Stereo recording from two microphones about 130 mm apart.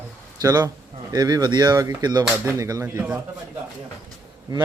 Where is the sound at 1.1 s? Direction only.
30° right (ahead or behind).